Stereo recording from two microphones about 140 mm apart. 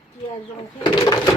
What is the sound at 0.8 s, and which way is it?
Speech, 25° left (ahead or behind).